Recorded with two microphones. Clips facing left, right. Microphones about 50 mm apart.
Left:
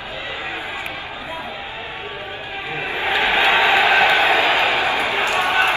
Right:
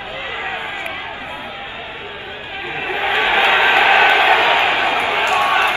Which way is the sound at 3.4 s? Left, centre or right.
Right.